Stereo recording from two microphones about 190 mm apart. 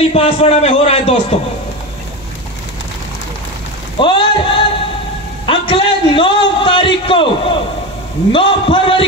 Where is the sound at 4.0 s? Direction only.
25° left (ahead or behind).